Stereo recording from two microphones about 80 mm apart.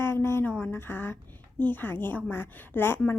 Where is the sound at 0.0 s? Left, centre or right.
Left.